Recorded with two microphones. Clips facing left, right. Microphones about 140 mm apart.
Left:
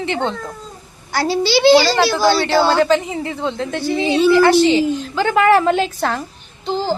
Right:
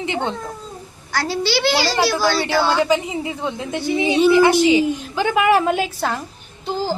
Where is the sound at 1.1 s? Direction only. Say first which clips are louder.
Left 4 dB; 15° left (ahead or behind).